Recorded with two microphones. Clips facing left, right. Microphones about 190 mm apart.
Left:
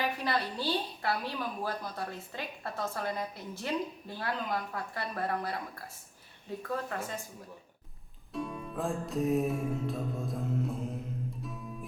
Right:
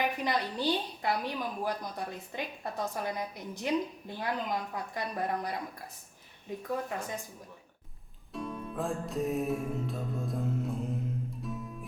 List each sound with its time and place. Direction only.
0.0 s a woman's voice: 15° right (ahead or behind)
8.3 s music: centre (ahead or behind)